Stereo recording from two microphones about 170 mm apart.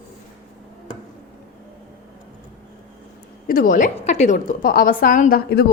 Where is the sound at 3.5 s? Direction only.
55° left (ahead or behind).